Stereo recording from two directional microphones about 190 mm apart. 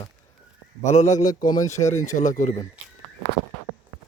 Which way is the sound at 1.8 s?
40° left (ahead or behind).